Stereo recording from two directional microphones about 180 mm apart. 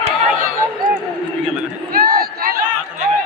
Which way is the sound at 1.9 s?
50° right (ahead or behind).